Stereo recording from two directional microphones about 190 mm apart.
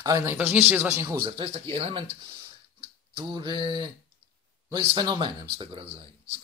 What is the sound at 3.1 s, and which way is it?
A man's voice, 25° right (ahead or behind).